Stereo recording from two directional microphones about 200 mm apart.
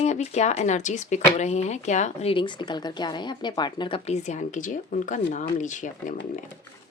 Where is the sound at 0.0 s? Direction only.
35° left (ahead or behind).